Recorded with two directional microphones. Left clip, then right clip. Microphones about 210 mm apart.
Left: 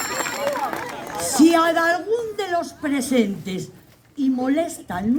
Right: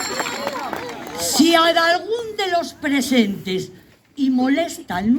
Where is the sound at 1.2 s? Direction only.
50° left (ahead or behind).